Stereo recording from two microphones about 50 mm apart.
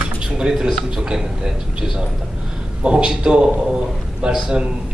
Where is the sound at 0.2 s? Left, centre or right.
Centre.